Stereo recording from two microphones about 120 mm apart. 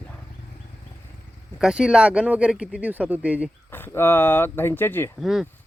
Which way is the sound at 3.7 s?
20° left (ahead or behind).